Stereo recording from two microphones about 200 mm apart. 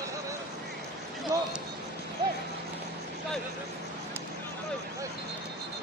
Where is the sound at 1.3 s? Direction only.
15° right (ahead or behind).